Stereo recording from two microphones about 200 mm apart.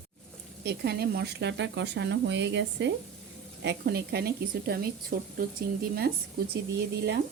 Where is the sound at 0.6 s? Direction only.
55° right (ahead or behind).